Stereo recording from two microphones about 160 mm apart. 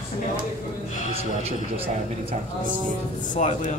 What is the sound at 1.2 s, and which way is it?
A man's voice, 40° right (ahead or behind).